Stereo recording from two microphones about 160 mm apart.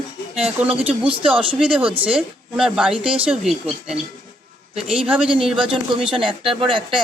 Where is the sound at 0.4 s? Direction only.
5° right (ahead or behind).